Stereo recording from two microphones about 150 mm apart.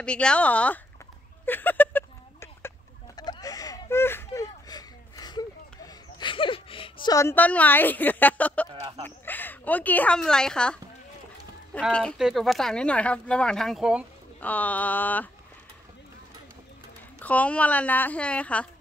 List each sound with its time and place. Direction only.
0.0 s a woman's voice: 5° left (ahead or behind)
1.4 s a sound: 15° left (ahead or behind)
3.2 s a sound: 25° left (ahead or behind)
7.2 s a woman's voice: 15° left (ahead or behind)
11.8 s speech: 5° left (ahead or behind)
14.4 s a woman's voice: 10° left (ahead or behind)
17.2 s a woman's voice: 10° left (ahead or behind)